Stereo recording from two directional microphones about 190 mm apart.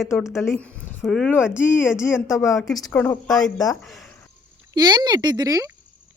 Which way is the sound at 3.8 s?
Centre (ahead or behind).